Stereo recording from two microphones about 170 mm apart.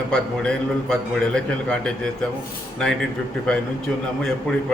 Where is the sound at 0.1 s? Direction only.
5° left (ahead or behind).